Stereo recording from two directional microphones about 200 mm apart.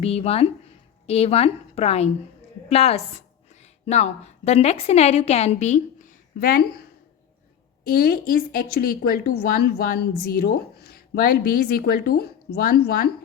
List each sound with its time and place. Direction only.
0.0 s a woman's voice: 30° left (ahead or behind)
6.4 s speech: 45° left (ahead or behind)
7.9 s speech: 50° left (ahead or behind)